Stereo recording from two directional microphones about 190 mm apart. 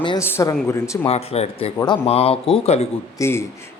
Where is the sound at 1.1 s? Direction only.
35° left (ahead or behind).